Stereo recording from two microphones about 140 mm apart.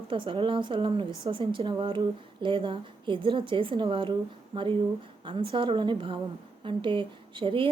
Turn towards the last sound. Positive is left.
turn(degrees=-40)  # may be behind; listen again after turning